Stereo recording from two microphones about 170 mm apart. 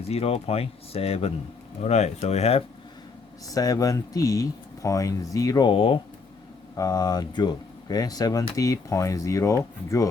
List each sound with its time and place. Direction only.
0.1 s speech: 35° left (ahead or behind)
3.4 s speech: 20° left (ahead or behind)